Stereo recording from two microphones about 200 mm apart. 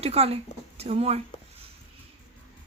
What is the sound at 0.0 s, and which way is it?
Speech, 30° right (ahead or behind).